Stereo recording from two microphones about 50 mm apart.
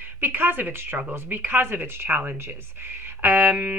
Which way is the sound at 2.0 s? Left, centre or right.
Right.